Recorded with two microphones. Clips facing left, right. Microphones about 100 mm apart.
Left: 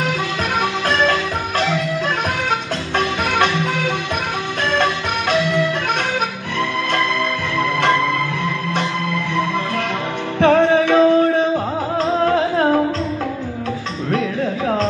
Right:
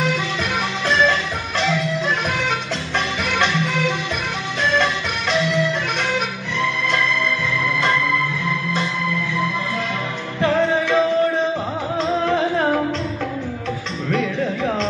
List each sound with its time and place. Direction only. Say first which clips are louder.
0.8 s music: right 1 dB; 50° left (ahead or behind)
3.3 s music: left 3 dB; 50° left (ahead or behind)
7.5 s music: left 6 dB; 60° left (ahead or behind)
10.4 s music: left 5 dB; 60° left (ahead or behind)
14.1 s a sound: left 1 dB; 40° left (ahead or behind)